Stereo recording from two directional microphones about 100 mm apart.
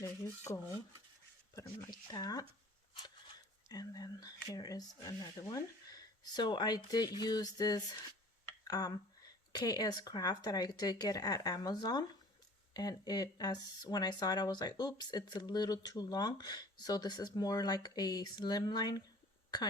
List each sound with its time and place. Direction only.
0.0 s dishes: 30° left (ahead or behind)
1.5 s speech: 35° left (ahead or behind)